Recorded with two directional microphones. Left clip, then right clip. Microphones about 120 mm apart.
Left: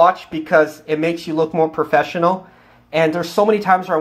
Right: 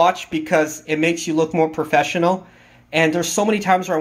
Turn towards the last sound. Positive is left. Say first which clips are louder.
# left 3 dB
turn(degrees=-20)  # may be behind; listen again after turning